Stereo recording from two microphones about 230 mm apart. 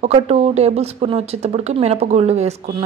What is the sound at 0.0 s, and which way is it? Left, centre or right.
A woman's voice, right.